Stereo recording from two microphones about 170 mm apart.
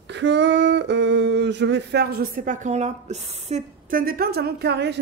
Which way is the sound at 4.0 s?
60° right (ahead or behind).